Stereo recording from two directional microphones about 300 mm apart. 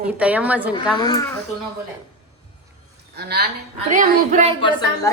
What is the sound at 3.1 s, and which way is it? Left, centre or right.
Speech, right.